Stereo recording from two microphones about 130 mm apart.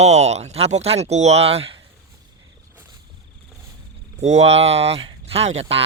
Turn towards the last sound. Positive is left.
turn(degrees=-50)  # may be behind; listen again after turning